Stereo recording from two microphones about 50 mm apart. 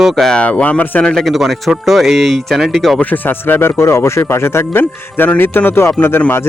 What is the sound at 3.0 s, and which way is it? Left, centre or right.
Speech, left.